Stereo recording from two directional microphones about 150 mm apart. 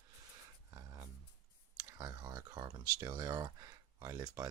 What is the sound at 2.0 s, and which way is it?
Speech, 25° right (ahead or behind).